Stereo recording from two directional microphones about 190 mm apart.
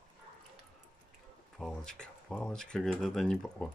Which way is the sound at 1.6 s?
5° left (ahead or behind).